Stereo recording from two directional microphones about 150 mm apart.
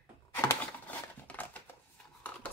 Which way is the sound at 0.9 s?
10° left (ahead or behind).